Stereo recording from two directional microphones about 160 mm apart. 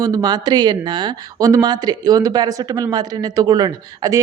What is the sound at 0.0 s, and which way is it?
Speech, 25° right (ahead or behind).